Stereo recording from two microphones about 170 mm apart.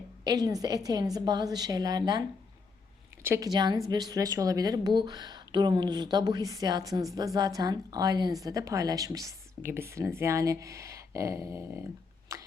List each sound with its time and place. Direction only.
0.3 s speech: 25° right (ahead or behind)
3.2 s speech: 15° right (ahead or behind)
12.3 s a sound: 15° right (ahead or behind)